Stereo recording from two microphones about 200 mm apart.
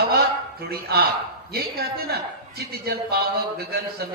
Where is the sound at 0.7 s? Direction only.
50° right (ahead or behind).